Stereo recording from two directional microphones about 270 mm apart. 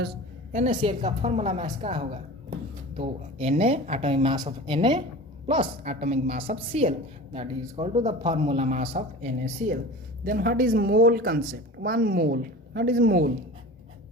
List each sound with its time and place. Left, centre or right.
0.5 s a man's voice: right